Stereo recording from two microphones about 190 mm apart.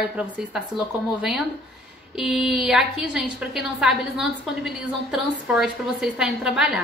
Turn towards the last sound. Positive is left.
turn(degrees=-5)  # may be behind; listen again after turning